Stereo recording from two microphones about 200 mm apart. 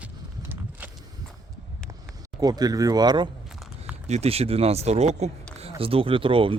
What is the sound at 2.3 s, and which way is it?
Speech, 20° right (ahead or behind).